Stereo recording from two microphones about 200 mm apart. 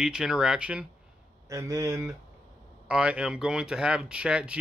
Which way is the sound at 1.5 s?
15° right (ahead or behind).